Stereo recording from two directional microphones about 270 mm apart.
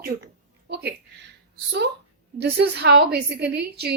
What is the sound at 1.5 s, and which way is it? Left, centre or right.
A woman's voice, right.